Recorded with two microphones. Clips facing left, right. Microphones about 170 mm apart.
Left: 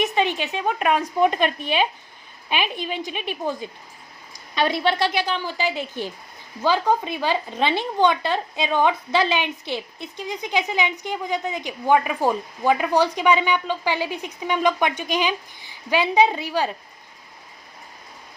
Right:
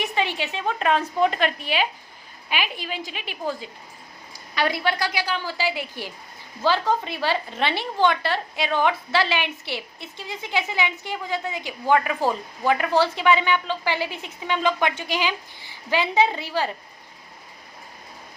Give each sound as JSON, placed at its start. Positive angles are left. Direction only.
{"t": 0.0, "sound": "a woman's voice", "side_deg": 20}